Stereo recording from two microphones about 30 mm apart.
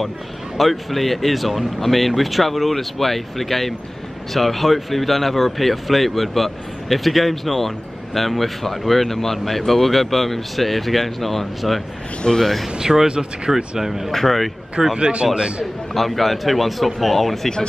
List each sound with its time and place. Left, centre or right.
0.6 s speech: centre
12.2 s speech: left
12.9 s speech: centre
14.1 s speech: centre
15.0 s speech: right
15.9 s speech: centre